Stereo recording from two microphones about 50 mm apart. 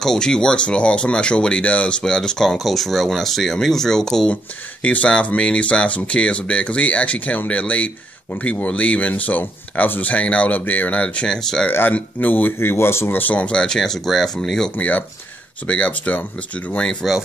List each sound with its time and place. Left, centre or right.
0.0 s speech: centre
4.8 s speech: left
11.2 s speech: centre
11.9 s speech: left
12.5 s speech: left
13.1 s speech: left
13.6 s speech: centre
14.8 s speech: left
17.0 s speech: centre